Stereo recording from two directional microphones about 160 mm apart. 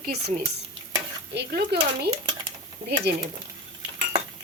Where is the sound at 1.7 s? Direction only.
90° right.